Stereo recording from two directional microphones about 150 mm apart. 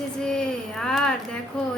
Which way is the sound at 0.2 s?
5° left (ahead or behind).